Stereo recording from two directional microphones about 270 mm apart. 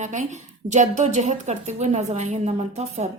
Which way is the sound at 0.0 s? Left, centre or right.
Right.